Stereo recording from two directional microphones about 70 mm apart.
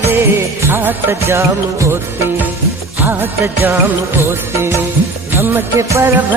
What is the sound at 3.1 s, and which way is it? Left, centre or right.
Music, right.